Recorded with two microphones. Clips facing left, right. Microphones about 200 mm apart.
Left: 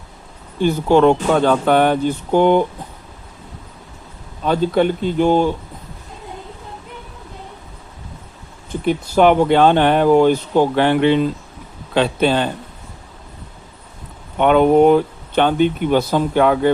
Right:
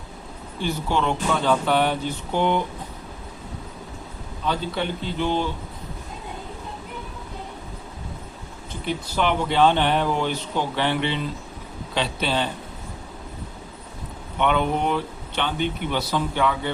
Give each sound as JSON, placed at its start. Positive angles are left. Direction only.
{"t": 0.6, "sound": "speech", "side_deg": 50}
{"t": 4.4, "sound": "speech", "side_deg": 50}
{"t": 8.9, "sound": "speech", "side_deg": 50}
{"t": 14.3, "sound": "speech", "side_deg": 50}